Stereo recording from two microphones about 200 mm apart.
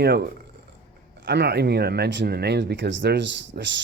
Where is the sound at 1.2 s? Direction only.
55° right (ahead or behind).